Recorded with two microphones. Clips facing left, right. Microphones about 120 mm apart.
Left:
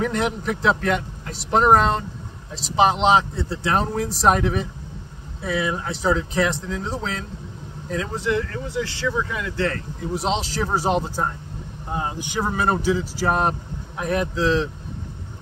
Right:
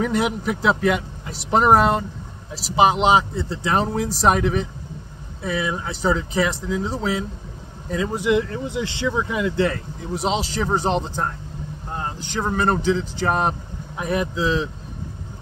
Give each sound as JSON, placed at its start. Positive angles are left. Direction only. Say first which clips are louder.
{"t": 0.0, "sound": "a man's voice", "louder": "right 2 dB", "side_deg": -5}
{"t": 8.2, "sound": "speech", "louder": "right 4 dB", "side_deg": -15}
{"t": 10.1, "sound": "a man's voice", "louder": "right 1 dB", "side_deg": 0}